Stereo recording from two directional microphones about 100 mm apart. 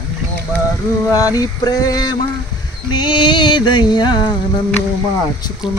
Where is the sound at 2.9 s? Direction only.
50° left (ahead or behind).